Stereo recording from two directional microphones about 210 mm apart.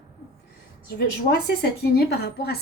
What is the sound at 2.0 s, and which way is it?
Speech, 50° left (ahead or behind).